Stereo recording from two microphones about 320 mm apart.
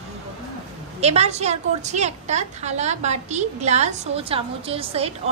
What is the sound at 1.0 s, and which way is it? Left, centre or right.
A woman's voice, centre.